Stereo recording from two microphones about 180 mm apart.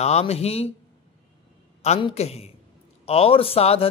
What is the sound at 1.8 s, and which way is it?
A man's voice, 35° left (ahead or behind).